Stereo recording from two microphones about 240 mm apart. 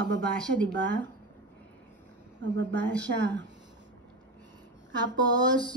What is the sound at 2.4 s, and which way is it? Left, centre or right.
Speech, right.